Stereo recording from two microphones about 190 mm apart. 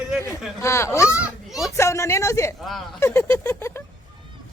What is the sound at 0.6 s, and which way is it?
A woman's voice, 15° left (ahead or behind).